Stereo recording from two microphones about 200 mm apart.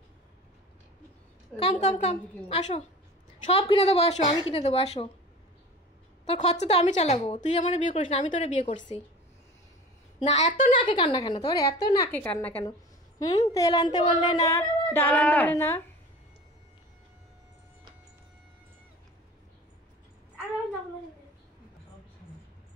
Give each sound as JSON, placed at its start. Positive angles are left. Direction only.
{"t": 1.6, "sound": "a woman's voice", "side_deg": 30}
{"t": 6.2, "sound": "a woman's voice", "side_deg": 35}
{"t": 10.2, "sound": "a woman's voice", "side_deg": 35}
{"t": 10.8, "sound": "a woman's voice", "side_deg": 25}
{"t": 14.9, "sound": "speech", "side_deg": 10}